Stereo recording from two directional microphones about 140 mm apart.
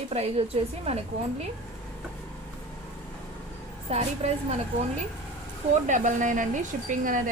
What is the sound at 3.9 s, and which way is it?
Speech, 50° right (ahead or behind).